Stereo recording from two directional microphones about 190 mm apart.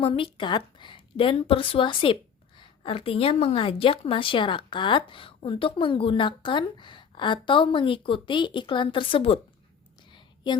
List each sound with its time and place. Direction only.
0.0 s a woman's voice: 30° left (ahead or behind)